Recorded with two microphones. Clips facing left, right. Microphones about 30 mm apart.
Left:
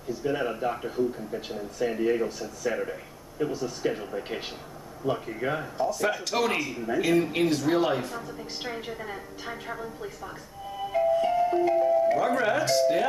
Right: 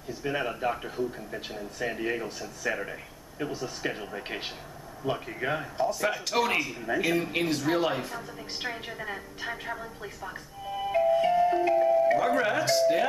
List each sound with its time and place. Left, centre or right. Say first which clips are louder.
0.2 s speech: left 1 dB; centre
10.2 s music: right 1 dB; centre